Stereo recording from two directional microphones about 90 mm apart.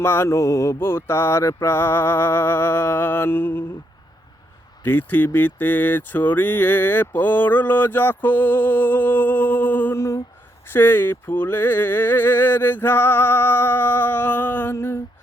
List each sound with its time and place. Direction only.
0.0 s speech: 25° left (ahead or behind)
4.8 s speech: 20° left (ahead or behind)